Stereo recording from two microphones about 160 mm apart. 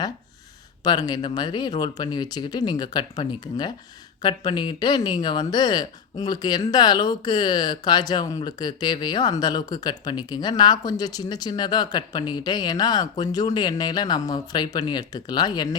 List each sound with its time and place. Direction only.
0.9 s speech: 25° left (ahead or behind)